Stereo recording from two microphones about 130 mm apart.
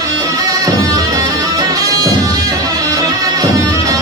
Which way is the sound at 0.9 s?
30° right (ahead or behind).